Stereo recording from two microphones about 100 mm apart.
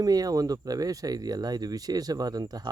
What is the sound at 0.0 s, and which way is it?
Speech, 40° right (ahead or behind).